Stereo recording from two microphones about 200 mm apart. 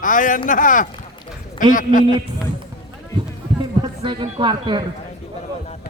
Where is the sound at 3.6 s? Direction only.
25° right (ahead or behind).